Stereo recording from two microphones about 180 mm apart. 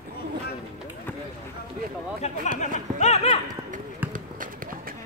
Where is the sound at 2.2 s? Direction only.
35° left (ahead or behind).